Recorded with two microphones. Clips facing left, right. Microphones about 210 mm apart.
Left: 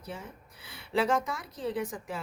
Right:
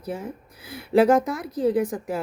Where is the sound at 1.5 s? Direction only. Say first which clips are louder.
Right 12 dB; 40° right (ahead or behind).